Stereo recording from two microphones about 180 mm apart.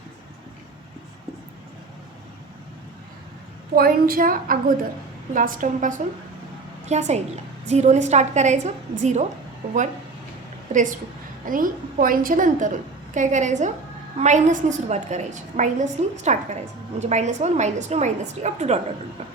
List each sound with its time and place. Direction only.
3.8 s a woman's voice: 55° right (ahead or behind); by 9.8 s 35° right (ahead or behind)
10.7 s a woman's voice: 45° right (ahead or behind)